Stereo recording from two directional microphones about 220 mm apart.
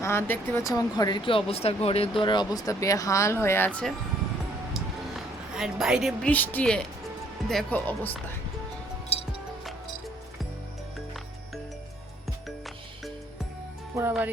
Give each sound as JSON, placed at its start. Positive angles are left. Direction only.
{"t": 0.0, "sound": "speech", "side_deg": 10}
{"t": 4.7, "sound": "a sound", "side_deg": 0}
{"t": 7.5, "sound": "speech", "side_deg": 5}
{"t": 9.1, "sound": "music", "side_deg": 30}
{"t": 13.9, "sound": "music", "side_deg": -10}